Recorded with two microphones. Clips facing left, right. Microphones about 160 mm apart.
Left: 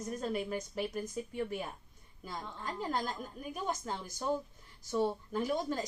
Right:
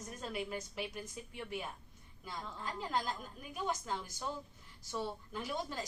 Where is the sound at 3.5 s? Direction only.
45° left (ahead or behind).